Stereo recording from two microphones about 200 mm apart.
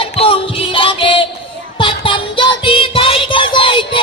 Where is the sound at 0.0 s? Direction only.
25° left (ahead or behind).